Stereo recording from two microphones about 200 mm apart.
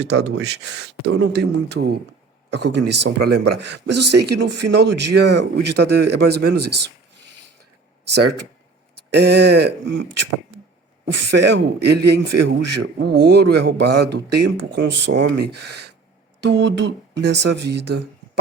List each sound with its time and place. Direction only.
0.0 s a man's voice: 55° right (ahead or behind)
9.0 s a man's voice: 55° right (ahead or behind)